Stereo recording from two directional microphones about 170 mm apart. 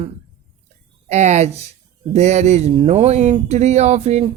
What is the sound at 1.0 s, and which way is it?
Speech, 40° right (ahead or behind).